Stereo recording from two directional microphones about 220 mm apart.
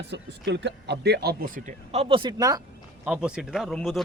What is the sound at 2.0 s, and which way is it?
Speech, 25° right (ahead or behind).